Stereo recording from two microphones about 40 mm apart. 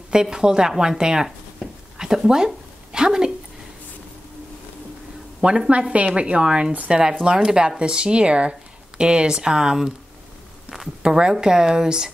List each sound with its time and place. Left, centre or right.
0.1 s a woman's voice: centre
5.7 s speech: right
7.2 s speech: centre
11.0 s a woman's voice: right